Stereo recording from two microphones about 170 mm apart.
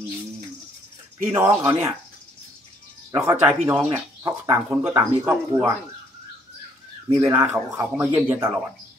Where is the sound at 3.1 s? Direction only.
15° right (ahead or behind).